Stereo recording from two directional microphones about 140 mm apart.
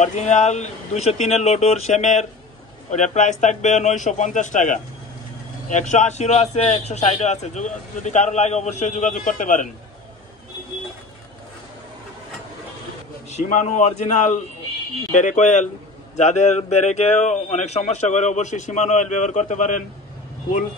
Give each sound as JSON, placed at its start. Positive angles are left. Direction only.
{"t": 0.0, "sound": "a man's voice", "side_deg": 55}
{"t": 13.3, "sound": "a man's voice", "side_deg": 55}